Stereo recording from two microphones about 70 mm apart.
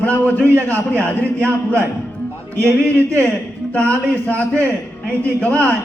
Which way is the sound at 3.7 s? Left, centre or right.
Centre.